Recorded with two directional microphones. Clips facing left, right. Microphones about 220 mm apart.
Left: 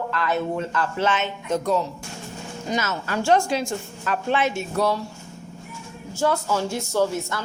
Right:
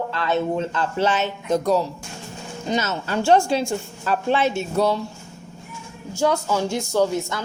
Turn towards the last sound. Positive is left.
turn(degrees=-15)  # may be behind; listen again after turning